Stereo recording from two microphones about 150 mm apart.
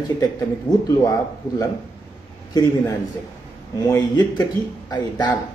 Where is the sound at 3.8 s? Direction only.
25° left (ahead or behind).